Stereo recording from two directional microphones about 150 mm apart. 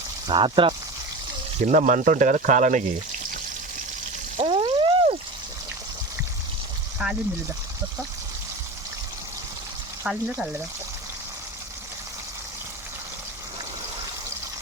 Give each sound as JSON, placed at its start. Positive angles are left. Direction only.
{"t": 0.3, "sound": "speech", "side_deg": -35}
{"t": 1.6, "sound": "speech", "side_deg": -60}
{"t": 4.4, "sound": "a sound", "side_deg": -40}
{"t": 7.0, "sound": "speech", "side_deg": -10}
{"t": 10.0, "sound": "speech", "side_deg": -10}